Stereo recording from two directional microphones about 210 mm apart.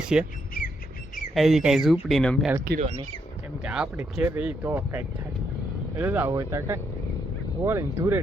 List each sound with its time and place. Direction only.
0.1 s speech: 5° right (ahead or behind)
1.3 s speech: centre (ahead or behind)
2.6 s speech: 35° right (ahead or behind)
3.6 s speech: 5° right (ahead or behind)